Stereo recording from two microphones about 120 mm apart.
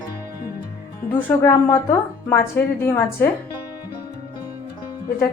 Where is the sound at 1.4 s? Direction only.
20° left (ahead or behind).